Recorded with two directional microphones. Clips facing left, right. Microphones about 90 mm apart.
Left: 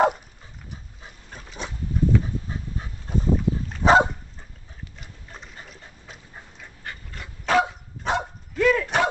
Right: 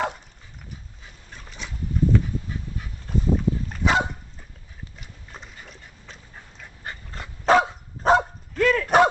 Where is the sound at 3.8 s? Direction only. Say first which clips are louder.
Left 6 dB; 40° left (ahead or behind).